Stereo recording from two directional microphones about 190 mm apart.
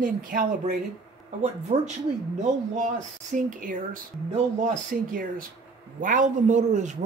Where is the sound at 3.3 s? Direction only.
45° right (ahead or behind).